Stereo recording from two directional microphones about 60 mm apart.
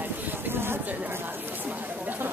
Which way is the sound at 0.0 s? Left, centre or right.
Right.